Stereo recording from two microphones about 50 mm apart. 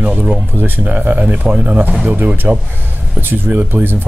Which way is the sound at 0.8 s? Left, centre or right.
Right.